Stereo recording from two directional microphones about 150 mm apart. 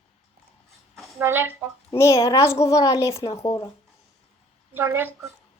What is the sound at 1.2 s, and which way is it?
Speech, 15° right (ahead or behind).